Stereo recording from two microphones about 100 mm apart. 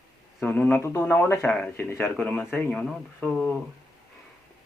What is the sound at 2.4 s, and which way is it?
Speech, centre (ahead or behind).